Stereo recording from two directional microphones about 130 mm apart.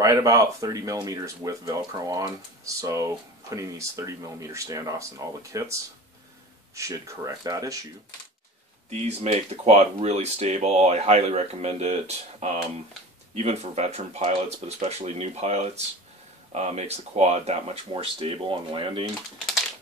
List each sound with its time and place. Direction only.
0.0 s speech: 25° right (ahead or behind)
8.9 s speech: 55° right (ahead or behind)
18.2 s speech: 40° right (ahead or behind)